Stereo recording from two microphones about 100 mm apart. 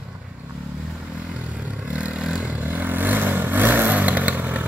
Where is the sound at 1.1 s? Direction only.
10° right (ahead or behind).